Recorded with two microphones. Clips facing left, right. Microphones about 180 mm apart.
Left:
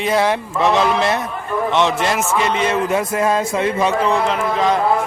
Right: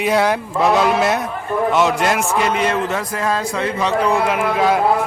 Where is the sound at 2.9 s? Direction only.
20° left (ahead or behind).